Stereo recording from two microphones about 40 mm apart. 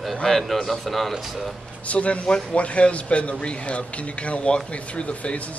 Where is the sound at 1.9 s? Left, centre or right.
Left.